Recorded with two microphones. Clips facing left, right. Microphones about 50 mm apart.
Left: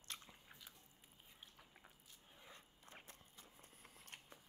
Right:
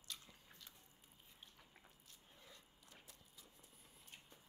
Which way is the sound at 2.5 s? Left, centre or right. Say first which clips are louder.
Left 6 dB; left.